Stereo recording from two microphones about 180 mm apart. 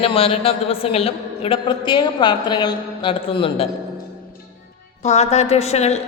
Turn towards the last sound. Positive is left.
turn(degrees=35)  # may be behind; listen again after turning